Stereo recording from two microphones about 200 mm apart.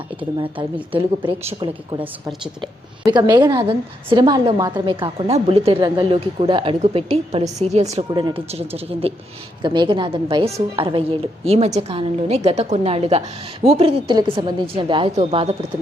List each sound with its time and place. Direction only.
0.2 s a woman's voice: 25° right (ahead or behind)